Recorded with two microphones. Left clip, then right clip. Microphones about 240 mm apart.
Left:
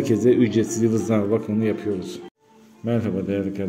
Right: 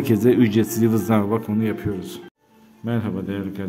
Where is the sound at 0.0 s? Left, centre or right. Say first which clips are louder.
Even; centre.